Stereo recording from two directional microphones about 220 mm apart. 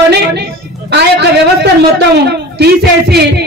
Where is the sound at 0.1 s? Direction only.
50° right (ahead or behind).